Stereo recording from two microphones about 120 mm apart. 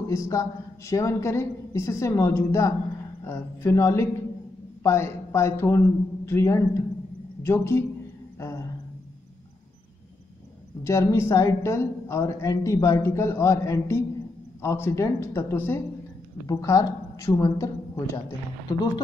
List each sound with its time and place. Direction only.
0.1 s a woman's voice: 25° left (ahead or behind)
8.4 s a sound: 25° left (ahead or behind)
10.8 s a woman's voice: 25° left (ahead or behind)